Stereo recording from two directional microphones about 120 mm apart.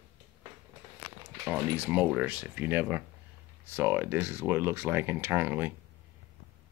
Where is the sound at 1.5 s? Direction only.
15° right (ahead or behind).